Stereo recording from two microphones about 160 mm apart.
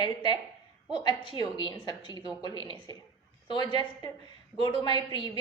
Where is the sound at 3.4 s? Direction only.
30° left (ahead or behind).